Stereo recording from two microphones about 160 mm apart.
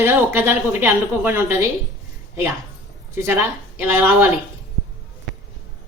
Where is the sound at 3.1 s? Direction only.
15° right (ahead or behind).